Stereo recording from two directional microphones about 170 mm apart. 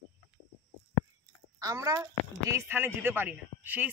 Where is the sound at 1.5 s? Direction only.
20° right (ahead or behind).